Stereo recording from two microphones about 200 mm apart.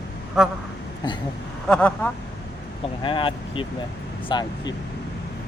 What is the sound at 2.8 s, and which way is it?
Speech, 25° left (ahead or behind).